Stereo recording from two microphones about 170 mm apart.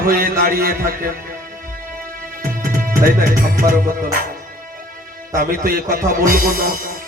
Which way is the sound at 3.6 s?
55° right (ahead or behind).